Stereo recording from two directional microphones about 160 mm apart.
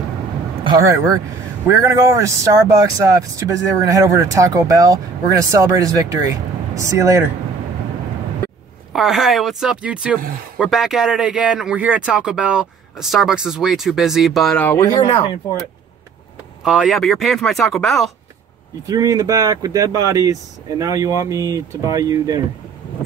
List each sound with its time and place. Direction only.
0.7 s speech: 20° right (ahead or behind)
8.9 s speech: centre (ahead or behind)
14.7 s speech: 25° left (ahead or behind)
16.6 s speech: centre (ahead or behind)
18.9 s speech: 20° right (ahead or behind)